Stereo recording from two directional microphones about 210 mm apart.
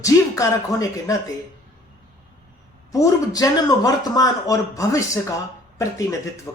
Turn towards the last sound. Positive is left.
turn(degrees=15)  # may be behind; listen again after turning